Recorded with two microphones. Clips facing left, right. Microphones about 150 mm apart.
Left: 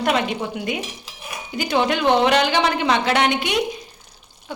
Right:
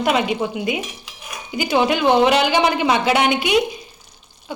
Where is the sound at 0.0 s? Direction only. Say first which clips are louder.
Right 2 dB; 5° right (ahead or behind).